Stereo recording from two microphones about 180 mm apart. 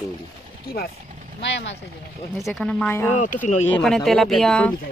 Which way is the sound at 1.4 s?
80° left.